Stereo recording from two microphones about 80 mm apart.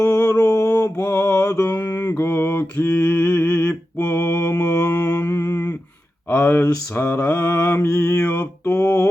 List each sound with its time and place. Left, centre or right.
0.0 s mantra: left
1.6 s mantra: left
4.6 s mantra: left
5.2 s humming: left
6.3 s mantra: left
8.2 s a sound: centre